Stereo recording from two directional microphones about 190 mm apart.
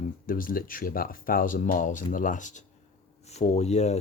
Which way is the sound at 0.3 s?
50° left (ahead or behind).